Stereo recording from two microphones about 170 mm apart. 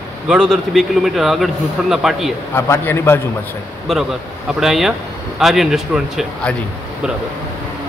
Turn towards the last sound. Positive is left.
turn(degrees=0)  # may be behind; listen again after turning